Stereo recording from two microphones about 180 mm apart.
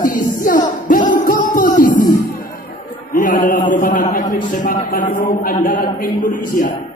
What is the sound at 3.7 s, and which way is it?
A man's voice, 50° left (ahead or behind).